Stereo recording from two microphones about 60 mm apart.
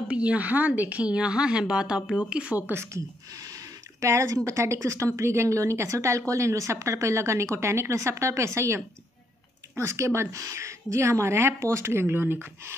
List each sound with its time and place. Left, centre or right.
0.1 s a woman's voice: right
2.6 s speech: right
4.0 s speech: right